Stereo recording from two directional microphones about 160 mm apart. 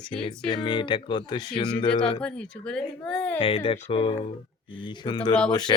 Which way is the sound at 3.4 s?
35° left (ahead or behind).